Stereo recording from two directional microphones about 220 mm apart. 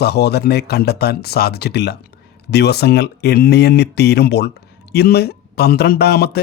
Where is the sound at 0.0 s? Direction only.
45° left (ahead or behind).